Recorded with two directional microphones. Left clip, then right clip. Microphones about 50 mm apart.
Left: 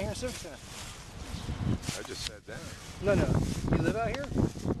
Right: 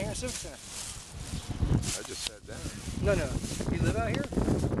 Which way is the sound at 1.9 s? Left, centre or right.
Right.